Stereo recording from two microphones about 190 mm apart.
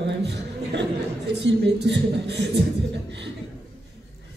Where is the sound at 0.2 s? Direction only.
65° right (ahead or behind).